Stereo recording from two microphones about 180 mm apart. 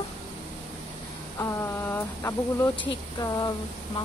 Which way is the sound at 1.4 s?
15° left (ahead or behind).